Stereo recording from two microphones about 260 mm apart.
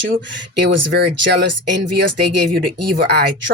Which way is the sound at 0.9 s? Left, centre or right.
Right.